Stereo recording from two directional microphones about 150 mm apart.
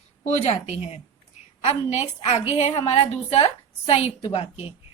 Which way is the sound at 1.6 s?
45° left (ahead or behind).